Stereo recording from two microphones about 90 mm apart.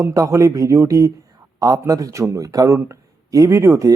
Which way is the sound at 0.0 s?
35° right (ahead or behind).